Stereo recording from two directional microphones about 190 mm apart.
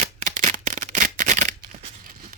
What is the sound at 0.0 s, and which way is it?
Shuffling cards, 40° right (ahead or behind).